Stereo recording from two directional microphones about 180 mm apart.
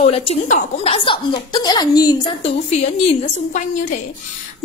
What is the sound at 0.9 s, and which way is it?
A woman's voice, 30° left (ahead or behind).